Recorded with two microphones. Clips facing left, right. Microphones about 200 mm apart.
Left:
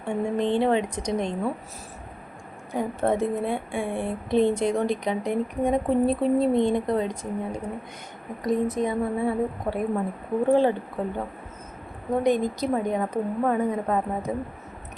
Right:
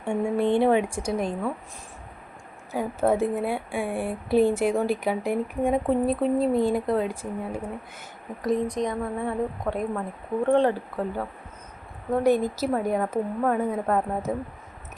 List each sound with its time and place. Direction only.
0.0 s a woman's voice: 10° right (ahead or behind)
2.7 s a woman's voice: 5° right (ahead or behind)
8.4 s a woman's voice: 5° left (ahead or behind)